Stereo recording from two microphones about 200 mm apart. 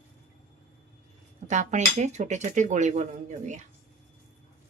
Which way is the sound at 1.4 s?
35° right (ahead or behind).